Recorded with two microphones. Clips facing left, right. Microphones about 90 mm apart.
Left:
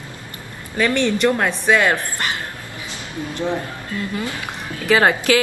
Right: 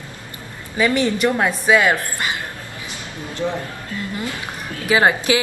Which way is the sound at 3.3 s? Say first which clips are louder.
Even; 20° left (ahead or behind).